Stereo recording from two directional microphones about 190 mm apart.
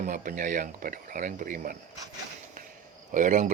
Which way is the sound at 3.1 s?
45° right (ahead or behind).